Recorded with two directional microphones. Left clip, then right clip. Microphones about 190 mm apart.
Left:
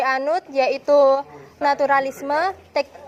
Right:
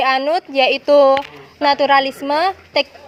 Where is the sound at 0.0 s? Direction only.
40° right (ahead or behind).